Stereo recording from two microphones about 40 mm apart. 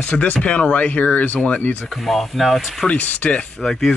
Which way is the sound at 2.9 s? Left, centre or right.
Left.